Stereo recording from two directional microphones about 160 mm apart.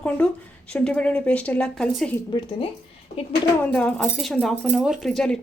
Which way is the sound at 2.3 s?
30° left (ahead or behind).